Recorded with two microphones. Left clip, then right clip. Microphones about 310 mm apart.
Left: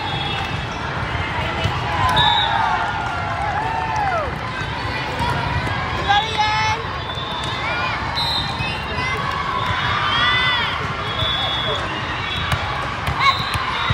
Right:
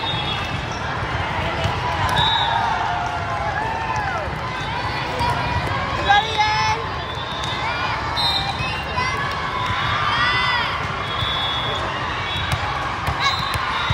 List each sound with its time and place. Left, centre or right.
6.0 s vehicle: right